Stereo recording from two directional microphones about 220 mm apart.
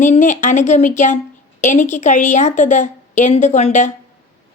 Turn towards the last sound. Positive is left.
turn(degrees=30)  # may be behind; listen again after turning